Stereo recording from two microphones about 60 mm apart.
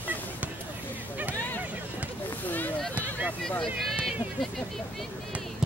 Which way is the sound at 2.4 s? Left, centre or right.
Left.